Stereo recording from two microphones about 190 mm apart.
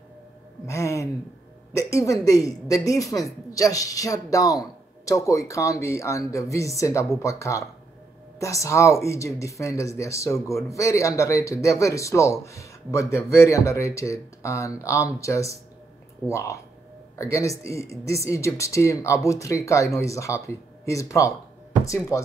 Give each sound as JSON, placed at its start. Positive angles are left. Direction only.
{"t": 0.7, "sound": "music", "side_deg": 15}
{"t": 1.7, "sound": "speech", "side_deg": 15}